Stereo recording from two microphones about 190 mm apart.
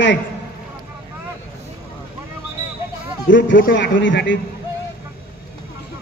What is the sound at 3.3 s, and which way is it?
Speech, 75° left (ahead or behind).